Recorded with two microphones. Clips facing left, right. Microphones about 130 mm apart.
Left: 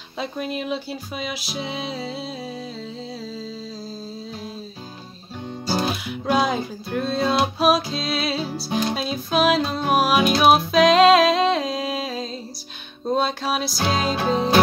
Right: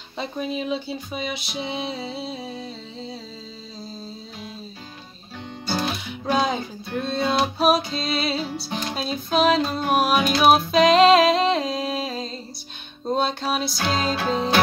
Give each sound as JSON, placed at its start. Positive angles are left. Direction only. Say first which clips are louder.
{"t": 0.2, "sound": "speech", "louder": "even", "side_deg": 0}
{"t": 5.7, "sound": "music", "louder": "left 2 dB", "side_deg": 5}
{"t": 7.5, "sound": "speech", "louder": "left 1 dB", "side_deg": 0}
{"t": 9.8, "sound": "music", "louder": "left 2 dB", "side_deg": 5}
{"t": 13.1, "sound": "speech", "louder": "left 1 dB", "side_deg": 0}